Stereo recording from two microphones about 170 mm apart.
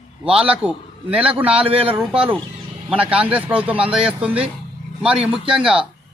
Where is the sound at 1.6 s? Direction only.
35° right (ahead or behind).